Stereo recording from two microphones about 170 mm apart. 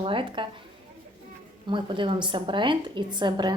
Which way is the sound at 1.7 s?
30° right (ahead or behind).